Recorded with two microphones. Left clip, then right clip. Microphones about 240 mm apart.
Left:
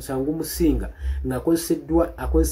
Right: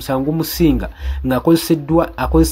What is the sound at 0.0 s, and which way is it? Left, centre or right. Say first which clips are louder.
Speech: right 7 dB; right.